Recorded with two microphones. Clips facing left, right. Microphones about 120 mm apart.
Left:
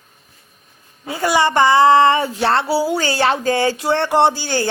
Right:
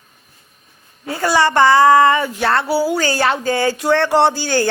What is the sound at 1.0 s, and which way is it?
Speech, 15° left (ahead or behind).